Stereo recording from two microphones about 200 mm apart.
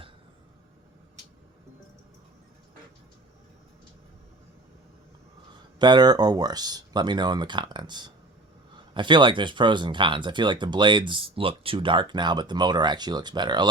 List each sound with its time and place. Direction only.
5.8 s speech: 20° right (ahead or behind)